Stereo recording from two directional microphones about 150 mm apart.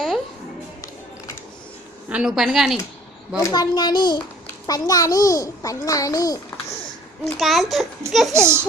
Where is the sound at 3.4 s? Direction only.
25° left (ahead or behind).